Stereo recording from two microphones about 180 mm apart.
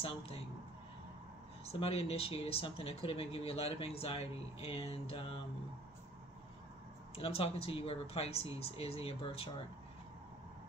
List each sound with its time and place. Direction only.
0.0 s speech: 30° left (ahead or behind)
1.7 s speech: 35° left (ahead or behind)
7.2 s speech: 30° left (ahead or behind)